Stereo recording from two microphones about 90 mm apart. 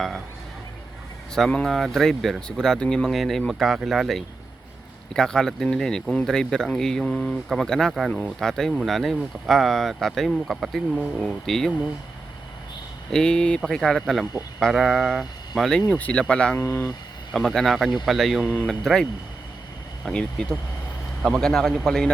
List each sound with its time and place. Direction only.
1.4 s speech: 5° left (ahead or behind)
13.1 s speech: 10° left (ahead or behind)
15.9 s speech: 15° left (ahead or behind)
16.6 s speech: 20° left (ahead or behind)
17.3 s speech: 5° left (ahead or behind)
18.4 s speech: 20° left (ahead or behind)
18.7 s speech: centre (ahead or behind)
20.1 s speech: 10° left (ahead or behind)